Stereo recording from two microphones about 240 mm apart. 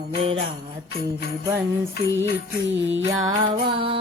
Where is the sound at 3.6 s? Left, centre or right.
Right.